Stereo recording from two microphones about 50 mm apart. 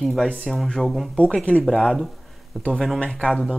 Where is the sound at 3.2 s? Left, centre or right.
Centre.